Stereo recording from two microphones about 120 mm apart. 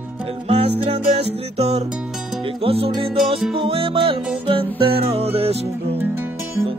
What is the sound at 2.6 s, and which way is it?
Music, 55° right (ahead or behind).